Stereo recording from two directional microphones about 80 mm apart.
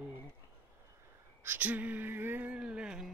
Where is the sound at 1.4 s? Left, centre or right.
Right; by 3.1 s centre.